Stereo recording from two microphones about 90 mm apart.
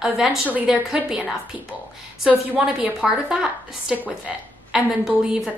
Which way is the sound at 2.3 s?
10° right (ahead or behind).